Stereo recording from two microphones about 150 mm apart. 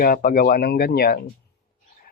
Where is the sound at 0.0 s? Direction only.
75° left (ahead or behind).